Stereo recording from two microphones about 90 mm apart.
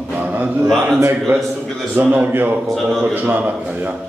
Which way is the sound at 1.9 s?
20° right (ahead or behind).